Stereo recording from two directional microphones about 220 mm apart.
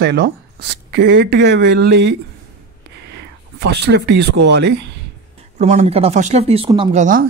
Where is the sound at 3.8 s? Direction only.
50° right (ahead or behind).